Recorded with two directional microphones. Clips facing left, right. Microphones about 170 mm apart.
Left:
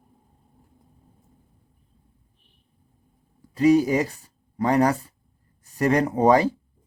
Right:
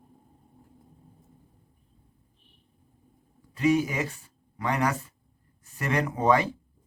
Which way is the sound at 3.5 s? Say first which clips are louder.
Left 6 dB; 35° left (ahead or behind).